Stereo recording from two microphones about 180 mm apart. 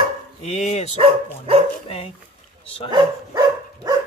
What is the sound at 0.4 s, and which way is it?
Speech, 40° left (ahead or behind).